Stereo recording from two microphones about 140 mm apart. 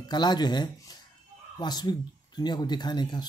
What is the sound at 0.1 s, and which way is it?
Speech, 30° left (ahead or behind).